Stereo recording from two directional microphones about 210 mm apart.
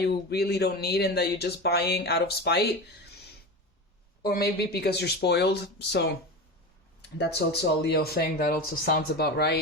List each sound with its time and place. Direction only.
0.0 s speech: 50° left (ahead or behind)
4.2 s speech: 50° left (ahead or behind)